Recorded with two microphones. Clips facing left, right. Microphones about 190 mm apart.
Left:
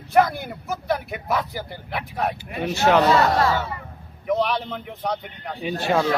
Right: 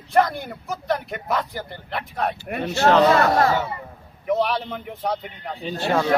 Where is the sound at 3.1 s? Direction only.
55° right (ahead or behind).